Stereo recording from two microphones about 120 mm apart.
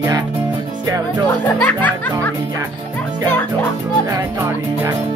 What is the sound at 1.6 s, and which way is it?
Music, 15° left (ahead or behind).